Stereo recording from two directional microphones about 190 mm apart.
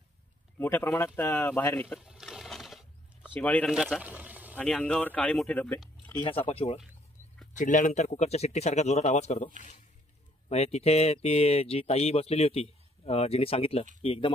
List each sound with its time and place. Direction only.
0.6 s speech: 10° left (ahead or behind)
2.0 s a sound: centre (ahead or behind)
3.3 s speech: 10° left (ahead or behind)
3.7 s a sound: 5° right (ahead or behind)
4.6 s speech: 5° left (ahead or behind)
6.1 s speech: 30° left (ahead or behind)
10.5 s speech: 35° left (ahead or behind)